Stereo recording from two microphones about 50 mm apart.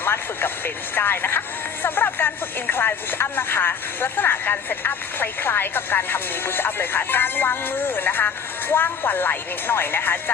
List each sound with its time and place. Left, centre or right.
0.0 s speech: left